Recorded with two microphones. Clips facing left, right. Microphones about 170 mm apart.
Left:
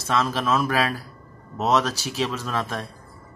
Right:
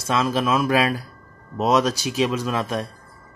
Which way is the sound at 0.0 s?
15° right (ahead or behind).